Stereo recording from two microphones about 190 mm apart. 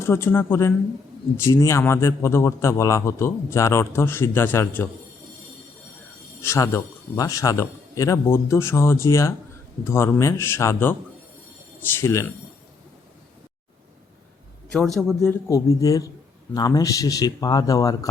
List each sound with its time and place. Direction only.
0.0 s a man's voice: 10° left (ahead or behind)
6.4 s a man's voice: 15° left (ahead or behind)
14.9 s a man's voice: centre (ahead or behind)
15.4 s a man's voice: 20° left (ahead or behind)